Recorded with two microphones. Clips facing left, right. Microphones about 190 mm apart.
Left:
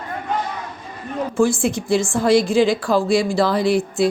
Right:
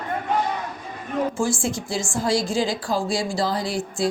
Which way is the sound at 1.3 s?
60° left (ahead or behind).